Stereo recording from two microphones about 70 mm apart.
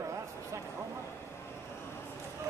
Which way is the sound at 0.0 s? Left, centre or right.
Right.